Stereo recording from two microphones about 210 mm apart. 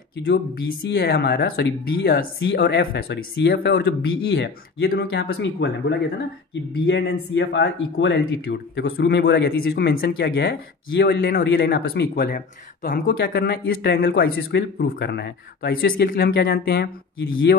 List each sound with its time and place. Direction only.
0.8 s speech: 50° left (ahead or behind)